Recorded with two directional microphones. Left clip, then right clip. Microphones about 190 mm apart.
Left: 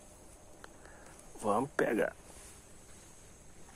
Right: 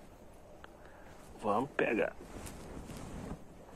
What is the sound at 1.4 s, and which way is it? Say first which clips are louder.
Speech: left 1 dB; 35° left (ahead or behind).